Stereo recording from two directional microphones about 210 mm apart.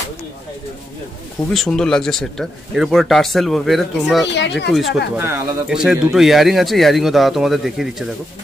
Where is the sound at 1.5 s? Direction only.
Centre (ahead or behind).